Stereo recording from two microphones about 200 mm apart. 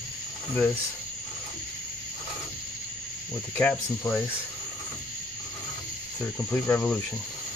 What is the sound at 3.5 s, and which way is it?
Cricket, 10° left (ahead or behind).